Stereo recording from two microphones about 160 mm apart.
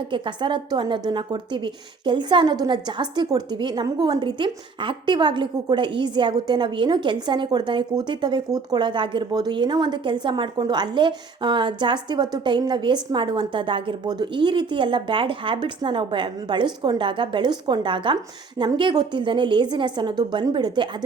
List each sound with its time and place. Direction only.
0.1 s a woman's voice: 30° right (ahead or behind)